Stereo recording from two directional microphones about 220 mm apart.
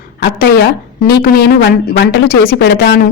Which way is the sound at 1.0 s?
40° left (ahead or behind).